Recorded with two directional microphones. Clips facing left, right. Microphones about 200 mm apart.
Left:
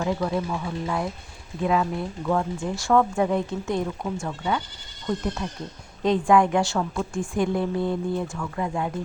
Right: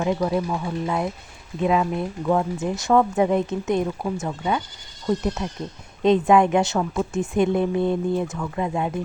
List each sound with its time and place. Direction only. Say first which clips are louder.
0.0 s speech: right 3 dB; 20° right (ahead or behind)